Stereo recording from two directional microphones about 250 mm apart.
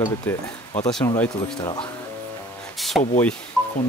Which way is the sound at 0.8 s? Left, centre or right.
Centre.